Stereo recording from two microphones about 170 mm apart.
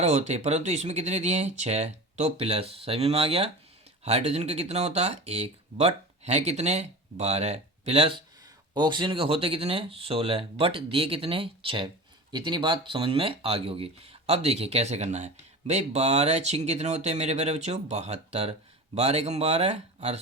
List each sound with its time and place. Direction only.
0.0 s speech: 40° right (ahead or behind)